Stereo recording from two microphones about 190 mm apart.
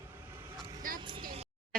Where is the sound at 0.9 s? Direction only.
25° right (ahead or behind).